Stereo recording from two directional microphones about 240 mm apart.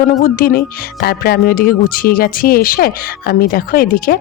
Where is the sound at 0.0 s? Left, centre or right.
Left.